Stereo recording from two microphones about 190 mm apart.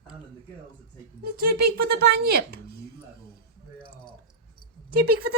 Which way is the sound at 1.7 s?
55° right (ahead or behind).